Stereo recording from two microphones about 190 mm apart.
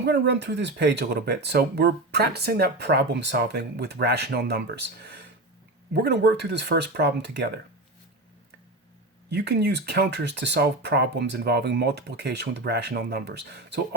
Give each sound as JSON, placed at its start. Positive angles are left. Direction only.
{"t": 0.0, "sound": "speech", "side_deg": -60}
{"t": 9.3, "sound": "speech", "side_deg": -60}